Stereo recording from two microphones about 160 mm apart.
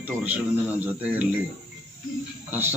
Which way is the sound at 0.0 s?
10° right (ahead or behind).